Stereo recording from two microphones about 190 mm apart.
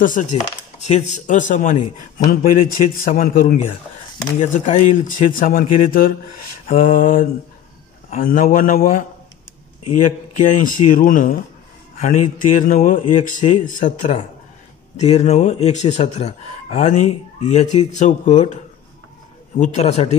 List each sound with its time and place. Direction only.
0.0 s speech: 45° left (ahead or behind)
19.6 s speech: 35° left (ahead or behind)